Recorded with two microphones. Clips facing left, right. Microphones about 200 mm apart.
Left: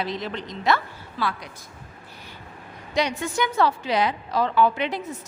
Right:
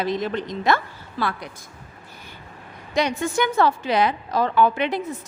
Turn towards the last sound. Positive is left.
turn(degrees=-60)  # may be behind; listen again after turning